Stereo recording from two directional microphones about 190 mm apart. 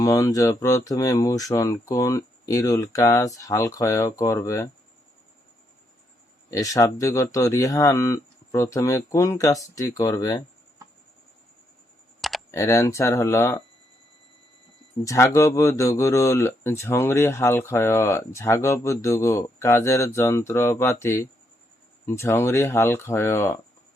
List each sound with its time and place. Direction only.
0.0 s speech: 20° left (ahead or behind)
6.5 s speech: 15° left (ahead or behind)
12.5 s speech: 15° left (ahead or behind)
15.0 s speech: 15° left (ahead or behind)